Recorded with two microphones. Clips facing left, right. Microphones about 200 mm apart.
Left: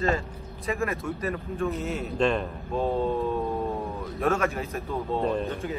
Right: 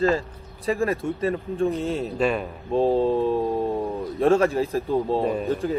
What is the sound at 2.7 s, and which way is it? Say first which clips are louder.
Speech: right 6 dB; 30° right (ahead or behind).